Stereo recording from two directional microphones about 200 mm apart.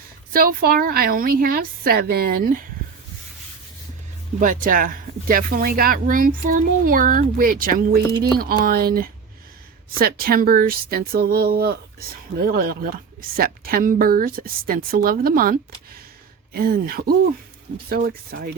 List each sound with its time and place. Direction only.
0.3 s speech: 50° right (ahead or behind)
4.4 s speech: 40° right (ahead or behind)